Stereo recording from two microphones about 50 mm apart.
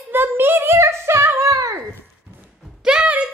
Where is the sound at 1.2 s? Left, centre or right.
Right.